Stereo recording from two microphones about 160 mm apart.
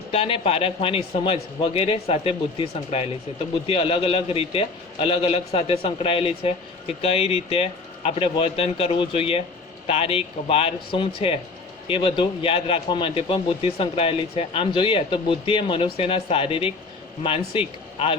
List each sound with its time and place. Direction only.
0.1 s speech: 35° left (ahead or behind)